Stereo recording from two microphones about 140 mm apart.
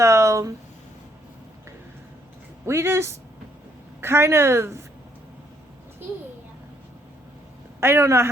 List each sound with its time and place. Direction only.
0.0 s a sound: 20° right (ahead or behind)
2.6 s speech: 20° right (ahead or behind)
7.8 s speech: 15° right (ahead or behind)